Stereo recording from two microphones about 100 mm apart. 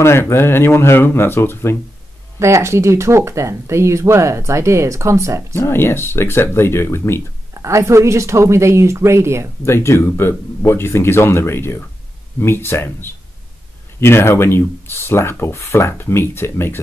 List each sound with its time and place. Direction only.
0.0 s speech: 25° left (ahead or behind)
2.3 s speech: 30° right (ahead or behind)
5.6 s speech: 25° left (ahead or behind)
7.5 s speech: 30° right (ahead or behind)
9.7 s speech: 25° left (ahead or behind)